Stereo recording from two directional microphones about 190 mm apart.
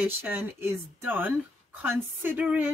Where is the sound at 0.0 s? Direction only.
10° right (ahead or behind).